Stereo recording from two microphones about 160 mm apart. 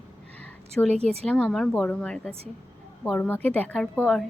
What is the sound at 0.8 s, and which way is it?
A woman's voice, 5° left (ahead or behind).